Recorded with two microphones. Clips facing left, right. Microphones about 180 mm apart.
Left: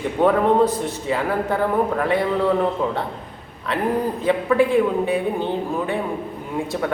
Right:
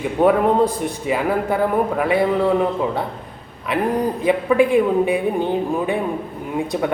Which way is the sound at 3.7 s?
10° right (ahead or behind).